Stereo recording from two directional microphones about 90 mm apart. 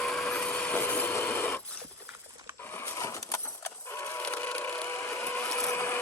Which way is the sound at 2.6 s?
25° left (ahead or behind).